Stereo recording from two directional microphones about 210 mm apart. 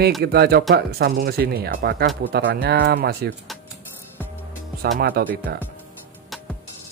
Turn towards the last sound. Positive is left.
turn(degrees=-45)  # may be behind; listen again after turning